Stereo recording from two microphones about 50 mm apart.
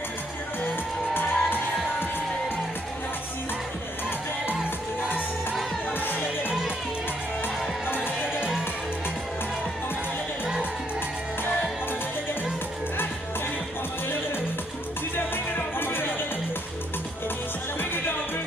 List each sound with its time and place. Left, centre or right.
1.1 s music: left
5.9 s music: left
7.9 s music: left
10.4 s music: centre
15.1 s music: left
17.7 s music: left